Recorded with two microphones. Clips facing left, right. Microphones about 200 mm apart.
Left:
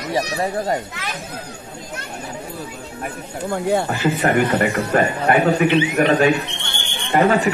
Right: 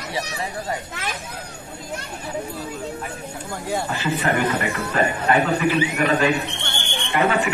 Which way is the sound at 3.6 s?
55° left (ahead or behind).